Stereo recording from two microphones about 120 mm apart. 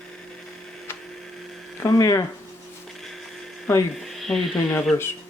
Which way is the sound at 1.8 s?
30° left (ahead or behind).